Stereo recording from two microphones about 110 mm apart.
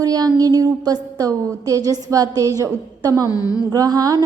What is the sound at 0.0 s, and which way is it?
A woman's voice, 35° right (ahead or behind).